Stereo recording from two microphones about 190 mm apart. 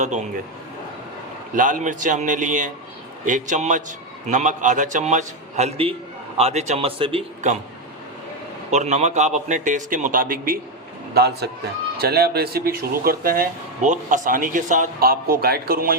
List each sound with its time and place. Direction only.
0.0 s a man's voice: 40° right (ahead or behind)
1.5 s a man's voice: 45° right (ahead or behind)
8.7 s a man's voice: 40° right (ahead or behind)